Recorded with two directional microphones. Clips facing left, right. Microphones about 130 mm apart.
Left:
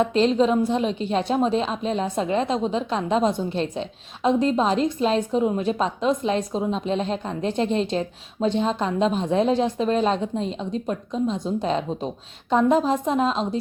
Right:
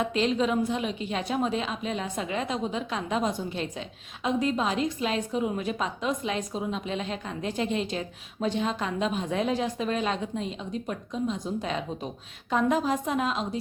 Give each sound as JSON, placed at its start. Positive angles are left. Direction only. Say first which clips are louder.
{"t": 0.0, "sound": "a woman's voice", "louder": "left 6 dB", "side_deg": 35}